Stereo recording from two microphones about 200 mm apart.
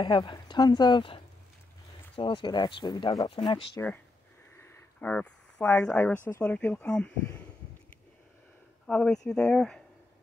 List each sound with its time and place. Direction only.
0.0 s speech: 20° left (ahead or behind)
4.6 s a sound: 10° left (ahead or behind)
6.2 s speech: 10° left (ahead or behind)
8.8 s speech: 5° left (ahead or behind)